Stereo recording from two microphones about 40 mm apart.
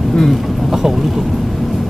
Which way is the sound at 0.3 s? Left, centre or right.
Centre.